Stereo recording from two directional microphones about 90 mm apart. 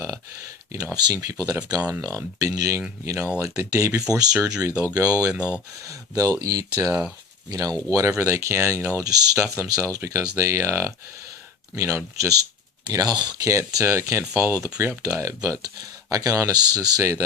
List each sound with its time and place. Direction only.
0.0 s speech: 35° right (ahead or behind)
1.9 s speech: 30° right (ahead or behind)
12.9 s speech: 45° right (ahead or behind)